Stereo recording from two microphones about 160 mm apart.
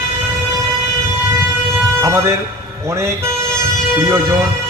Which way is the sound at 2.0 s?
15° right (ahead or behind).